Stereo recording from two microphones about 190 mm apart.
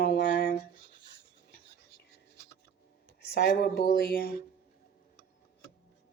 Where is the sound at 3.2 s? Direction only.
65° left (ahead or behind).